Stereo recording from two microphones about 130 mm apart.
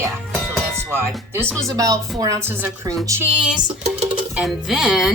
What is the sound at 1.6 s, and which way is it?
A woman's voice, 25° right (ahead or behind).